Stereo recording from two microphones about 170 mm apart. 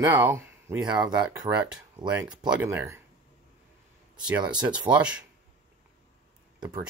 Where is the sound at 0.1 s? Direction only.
15° right (ahead or behind).